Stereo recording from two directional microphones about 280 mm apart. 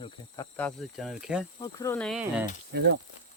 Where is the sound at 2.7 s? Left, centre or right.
Right.